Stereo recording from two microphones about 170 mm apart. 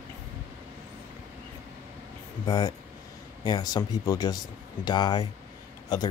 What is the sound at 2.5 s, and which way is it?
Speech, 25° left (ahead or behind).